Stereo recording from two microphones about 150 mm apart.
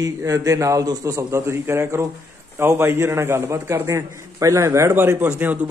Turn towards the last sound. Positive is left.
turn(degrees=-10)  # may be behind; listen again after turning